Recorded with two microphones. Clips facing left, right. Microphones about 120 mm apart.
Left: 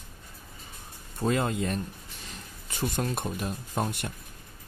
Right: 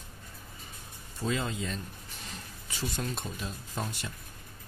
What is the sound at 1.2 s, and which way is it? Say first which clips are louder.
Speech: left 5 dB; 55° left (ahead or behind).